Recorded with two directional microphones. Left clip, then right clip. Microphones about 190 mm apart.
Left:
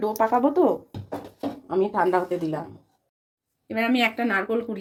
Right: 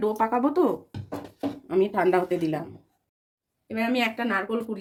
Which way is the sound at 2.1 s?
20° right (ahead or behind).